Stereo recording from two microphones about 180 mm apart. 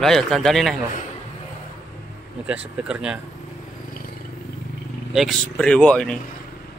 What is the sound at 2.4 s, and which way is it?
Speech, 5° right (ahead or behind).